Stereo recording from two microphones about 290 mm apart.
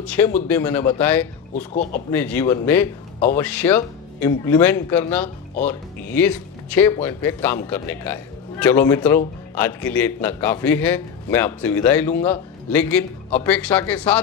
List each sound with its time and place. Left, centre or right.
0.0 s speech: centre
1.5 s speech: left
2.0 s speech: centre